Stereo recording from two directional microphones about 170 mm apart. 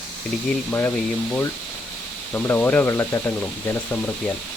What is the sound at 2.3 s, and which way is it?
Speech, 10° left (ahead or behind).